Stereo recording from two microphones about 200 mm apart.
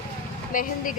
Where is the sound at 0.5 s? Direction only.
45° left (ahead or behind).